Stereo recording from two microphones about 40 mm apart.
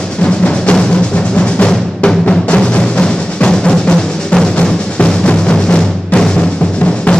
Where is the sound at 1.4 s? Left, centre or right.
Left.